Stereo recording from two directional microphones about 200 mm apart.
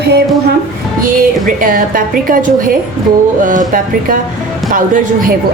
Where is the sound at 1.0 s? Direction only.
45° right (ahead or behind).